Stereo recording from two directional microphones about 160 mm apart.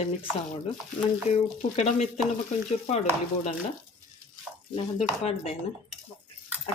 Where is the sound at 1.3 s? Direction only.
45° left (ahead or behind).